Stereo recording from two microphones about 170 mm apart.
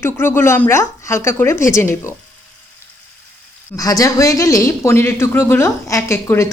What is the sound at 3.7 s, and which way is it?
Speech, 20° left (ahead or behind).